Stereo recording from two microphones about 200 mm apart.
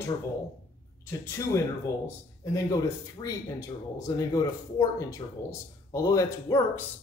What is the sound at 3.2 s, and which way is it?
Speech, 15° left (ahead or behind).